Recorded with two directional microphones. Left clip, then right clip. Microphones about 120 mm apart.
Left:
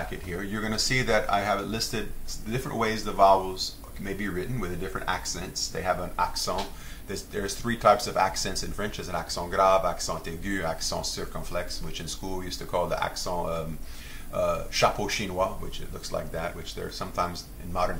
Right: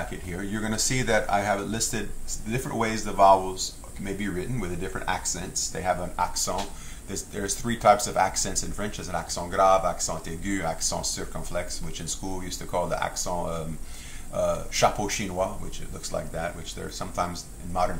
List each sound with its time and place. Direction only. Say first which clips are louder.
0.3 s speech: even; 15° right (ahead or behind)